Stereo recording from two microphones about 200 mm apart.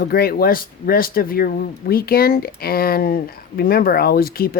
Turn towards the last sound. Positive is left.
turn(degrees=50)  # may be behind; listen again after turning